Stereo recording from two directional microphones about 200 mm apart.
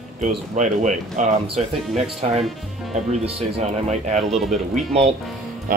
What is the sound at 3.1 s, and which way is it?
Speech, 35° right (ahead or behind).